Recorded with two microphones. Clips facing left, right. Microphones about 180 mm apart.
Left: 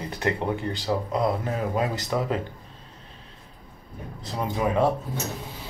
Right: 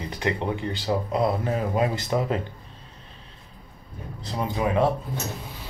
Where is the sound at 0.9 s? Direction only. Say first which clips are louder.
Right 1 dB; 15° right (ahead or behind).